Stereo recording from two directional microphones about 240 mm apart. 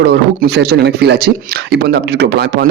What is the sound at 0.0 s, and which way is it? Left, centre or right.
A man's voice, right.